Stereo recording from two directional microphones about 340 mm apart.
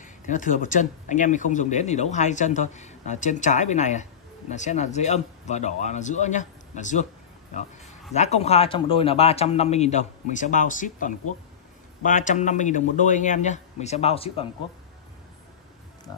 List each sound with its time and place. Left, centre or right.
0.0 s a man's voice: left
8.1 s a man's voice: centre